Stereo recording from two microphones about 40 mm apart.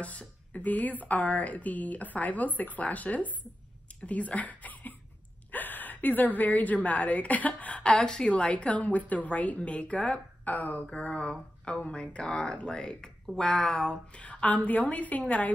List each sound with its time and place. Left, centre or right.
0.0 s a woman's voice: left
7.8 s speech: centre
8.3 s speech: left
10.9 s speech: left
14.1 s speech: left